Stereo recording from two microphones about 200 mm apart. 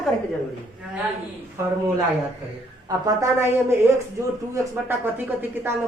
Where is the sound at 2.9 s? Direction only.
15° right (ahead or behind).